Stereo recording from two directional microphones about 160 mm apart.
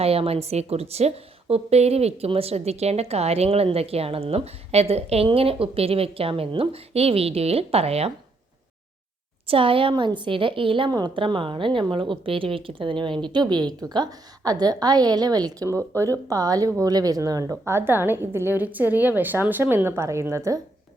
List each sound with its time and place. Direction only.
0.0 s a woman's voice: 40° right (ahead or behind)
9.5 s a woman's voice: 35° right (ahead or behind); by 20.6 s 20° right (ahead or behind)